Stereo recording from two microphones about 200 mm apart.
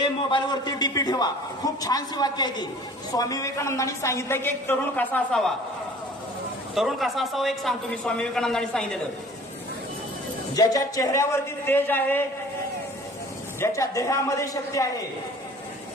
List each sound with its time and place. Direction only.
0.0 s a man's voice: 25° left (ahead or behind); by 5.5 s 5° left (ahead or behind)
6.7 s a man's voice: centre (ahead or behind)
10.5 s a woman's voice: 20° left (ahead or behind)
13.6 s a woman's voice: 15° left (ahead or behind)